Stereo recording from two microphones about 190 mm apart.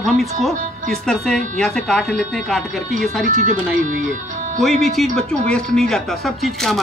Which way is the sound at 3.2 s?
40° right (ahead or behind).